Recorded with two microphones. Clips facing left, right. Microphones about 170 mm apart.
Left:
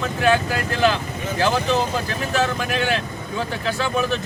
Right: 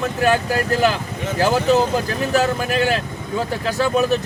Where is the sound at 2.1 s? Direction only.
40° right (ahead or behind).